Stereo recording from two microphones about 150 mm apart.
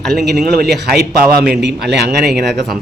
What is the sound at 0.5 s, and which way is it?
Speech, 90° right.